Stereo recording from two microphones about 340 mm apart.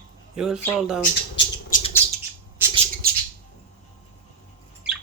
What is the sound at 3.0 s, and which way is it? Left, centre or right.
Bird, right.